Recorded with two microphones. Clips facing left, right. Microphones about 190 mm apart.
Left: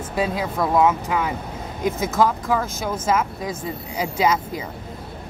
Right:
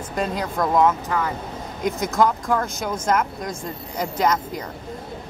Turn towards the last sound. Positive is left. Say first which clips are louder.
# left 1 dB
turn(degrees=10)  # may be behind; listen again after turning